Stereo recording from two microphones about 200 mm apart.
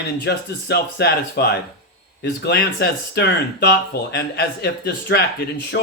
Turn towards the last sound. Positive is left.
turn(degrees=55)  # may be behind; listen again after turning